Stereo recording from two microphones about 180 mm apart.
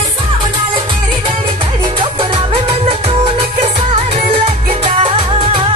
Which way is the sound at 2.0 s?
30° right (ahead or behind).